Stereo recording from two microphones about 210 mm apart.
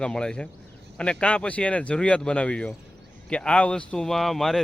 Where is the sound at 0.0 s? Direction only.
5° left (ahead or behind).